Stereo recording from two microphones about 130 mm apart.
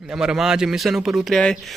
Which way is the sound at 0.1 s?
5° right (ahead or behind).